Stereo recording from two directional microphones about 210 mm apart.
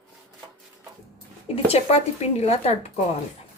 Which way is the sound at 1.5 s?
30° left (ahead or behind).